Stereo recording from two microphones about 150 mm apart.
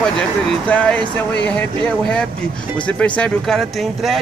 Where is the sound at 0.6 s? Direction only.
10° left (ahead or behind).